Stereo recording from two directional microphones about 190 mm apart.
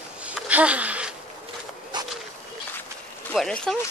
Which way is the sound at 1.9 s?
20° right (ahead or behind).